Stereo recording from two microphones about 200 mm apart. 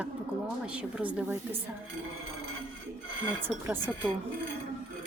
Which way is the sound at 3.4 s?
10° right (ahead or behind).